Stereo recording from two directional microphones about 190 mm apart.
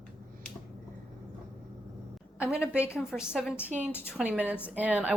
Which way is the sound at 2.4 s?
5° right (ahead or behind).